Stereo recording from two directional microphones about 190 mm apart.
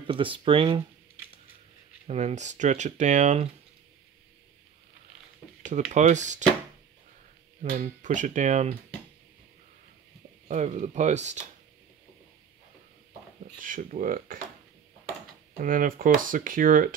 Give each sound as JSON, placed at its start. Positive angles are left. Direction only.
{"t": 0.0, "sound": "speech", "side_deg": -25}
{"t": 2.0, "sound": "speech", "side_deg": -35}
{"t": 5.7, "sound": "speech", "side_deg": -40}
{"t": 7.7, "sound": "speech", "side_deg": -45}
{"t": 10.5, "sound": "speech", "side_deg": -40}
{"t": 13.6, "sound": "speech", "side_deg": -45}
{"t": 15.6, "sound": "speech", "side_deg": -45}